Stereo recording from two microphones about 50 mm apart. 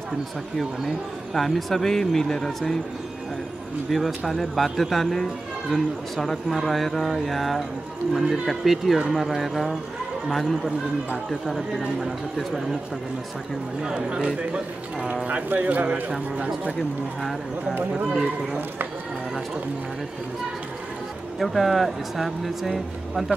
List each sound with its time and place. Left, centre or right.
0.6 s speech: centre
3.9 s speech: centre
13.8 s speech: centre
15.2 s speech: right
21.4 s speech: centre